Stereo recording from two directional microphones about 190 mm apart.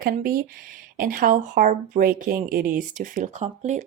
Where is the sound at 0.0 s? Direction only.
50° right (ahead or behind).